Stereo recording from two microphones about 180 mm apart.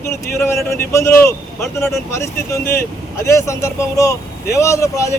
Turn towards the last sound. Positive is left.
turn(degrees=15)  # may be behind; listen again after turning